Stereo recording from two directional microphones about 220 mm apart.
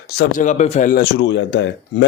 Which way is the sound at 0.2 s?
35° left (ahead or behind).